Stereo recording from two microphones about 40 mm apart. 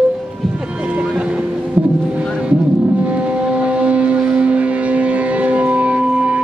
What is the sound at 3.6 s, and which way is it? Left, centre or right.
Music, right.